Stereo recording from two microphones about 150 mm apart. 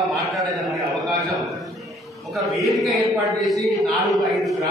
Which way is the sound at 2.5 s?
Centre (ahead or behind).